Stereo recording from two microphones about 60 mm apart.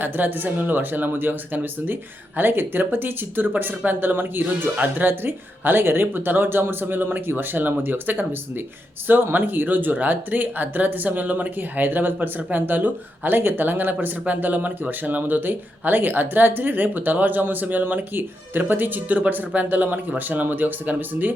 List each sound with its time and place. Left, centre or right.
0.0 s speech: right